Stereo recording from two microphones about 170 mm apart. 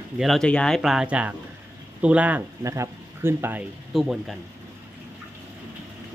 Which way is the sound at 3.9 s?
Centre (ahead or behind).